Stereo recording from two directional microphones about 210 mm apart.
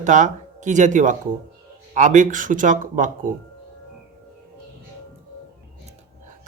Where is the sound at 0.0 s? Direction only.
35° right (ahead or behind).